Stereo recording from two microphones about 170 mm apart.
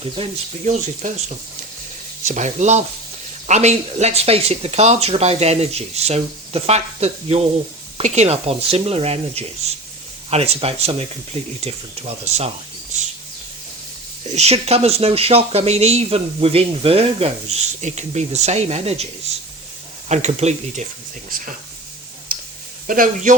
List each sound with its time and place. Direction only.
0.0 s speech: 40° right (ahead or behind)
14.3 s speech: 40° right (ahead or behind)
20.1 s speech: 40° right (ahead or behind)
21.2 s speech: 55° right (ahead or behind)
22.3 s a sound: 55° right (ahead or behind)
22.9 s speech: 55° right (ahead or behind)